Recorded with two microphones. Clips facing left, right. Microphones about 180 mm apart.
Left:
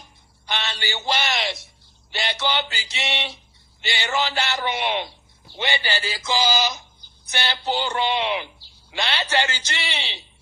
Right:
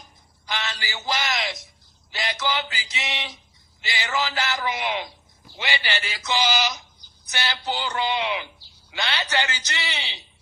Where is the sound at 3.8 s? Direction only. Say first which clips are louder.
Left 2 dB; 25° left (ahead or behind).